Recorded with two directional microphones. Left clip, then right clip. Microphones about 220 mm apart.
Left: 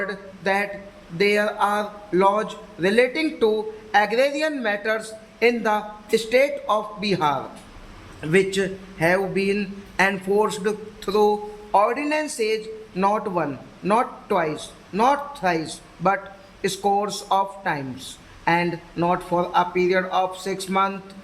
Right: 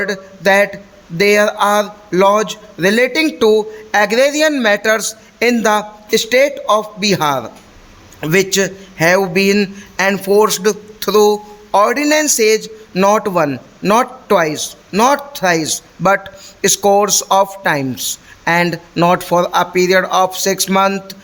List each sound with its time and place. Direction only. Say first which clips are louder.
0.0 s a man's voice: right 10 dB; 45° right (ahead or behind)